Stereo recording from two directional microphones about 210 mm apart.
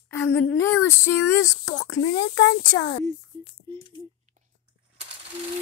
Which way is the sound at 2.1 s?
55° left (ahead or behind).